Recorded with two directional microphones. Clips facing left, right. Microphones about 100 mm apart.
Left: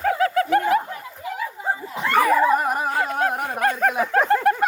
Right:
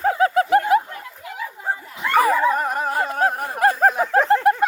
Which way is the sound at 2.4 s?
5° left (ahead or behind).